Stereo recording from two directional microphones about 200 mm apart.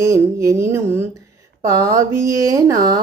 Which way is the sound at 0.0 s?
15° right (ahead or behind).